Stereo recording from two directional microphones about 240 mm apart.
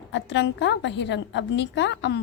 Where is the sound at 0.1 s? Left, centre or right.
Left.